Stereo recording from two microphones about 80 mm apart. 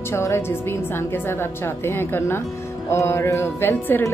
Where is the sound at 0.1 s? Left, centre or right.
Left.